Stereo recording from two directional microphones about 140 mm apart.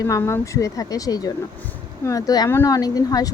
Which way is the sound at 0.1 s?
20° left (ahead or behind).